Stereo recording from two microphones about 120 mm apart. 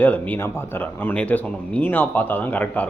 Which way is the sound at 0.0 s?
15° left (ahead or behind).